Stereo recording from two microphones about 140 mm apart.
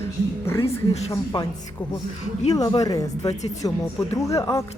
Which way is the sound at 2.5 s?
25° left (ahead or behind).